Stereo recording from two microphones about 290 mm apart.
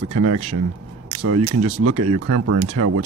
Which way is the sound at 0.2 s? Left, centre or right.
Right.